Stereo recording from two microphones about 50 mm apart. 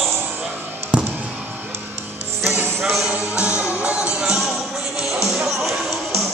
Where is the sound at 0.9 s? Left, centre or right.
Centre.